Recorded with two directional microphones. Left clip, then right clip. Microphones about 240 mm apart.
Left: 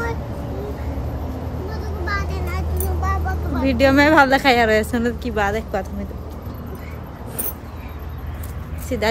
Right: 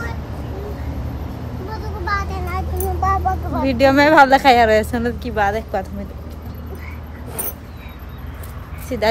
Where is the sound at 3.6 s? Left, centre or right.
Centre.